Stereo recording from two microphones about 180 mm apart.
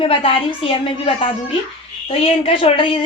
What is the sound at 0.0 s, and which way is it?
A woman's voice, 30° left (ahead or behind).